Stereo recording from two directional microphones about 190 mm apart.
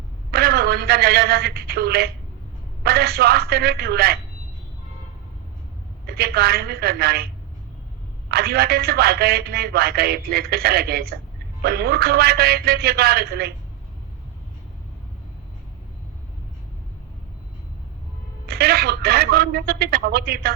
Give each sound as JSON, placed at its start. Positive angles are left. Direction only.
{"t": 0.3, "sound": "a man's voice", "side_deg": -55}
{"t": 6.1, "sound": "a man's voice", "side_deg": -55}
{"t": 8.3, "sound": "a man's voice", "side_deg": -55}
{"t": 18.4, "sound": "a man's voice", "side_deg": -55}